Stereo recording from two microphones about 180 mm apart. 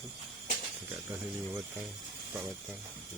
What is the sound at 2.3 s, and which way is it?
Speech, 5° right (ahead or behind).